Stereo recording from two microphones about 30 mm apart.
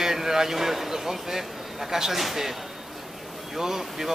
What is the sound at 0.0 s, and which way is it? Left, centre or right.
A man's voice, centre.